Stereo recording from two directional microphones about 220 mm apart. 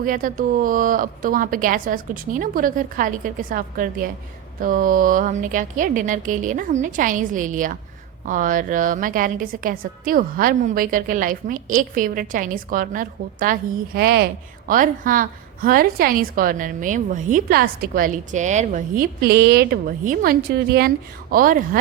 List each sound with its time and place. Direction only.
0.0 s a woman's voice: 40° right (ahead or behind)